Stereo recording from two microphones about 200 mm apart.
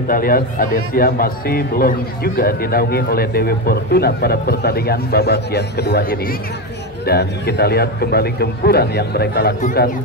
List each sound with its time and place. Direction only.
0.1 s a man's voice: 45° left (ahead or behind)